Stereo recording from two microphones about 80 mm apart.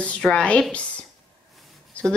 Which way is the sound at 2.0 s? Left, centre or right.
Centre.